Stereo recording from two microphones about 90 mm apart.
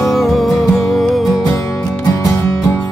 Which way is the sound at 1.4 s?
35° left (ahead or behind).